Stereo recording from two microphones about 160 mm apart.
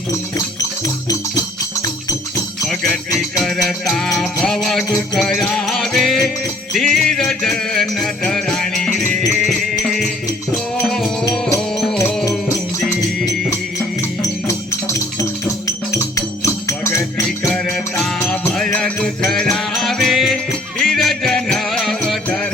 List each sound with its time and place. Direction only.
0.3 s music: 20° left (ahead or behind)
2.6 s music: 5° left (ahead or behind)
14.2 s music: 20° left (ahead or behind)
17.5 s music: 5° left (ahead or behind)